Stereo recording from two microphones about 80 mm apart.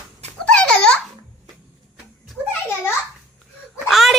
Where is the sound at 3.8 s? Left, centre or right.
Centre.